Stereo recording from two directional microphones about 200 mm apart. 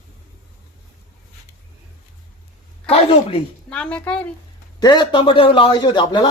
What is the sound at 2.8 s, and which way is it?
Speech, 30° left (ahead or behind).